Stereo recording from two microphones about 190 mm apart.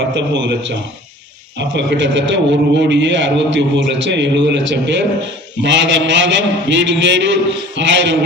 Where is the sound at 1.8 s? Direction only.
70° right (ahead or behind).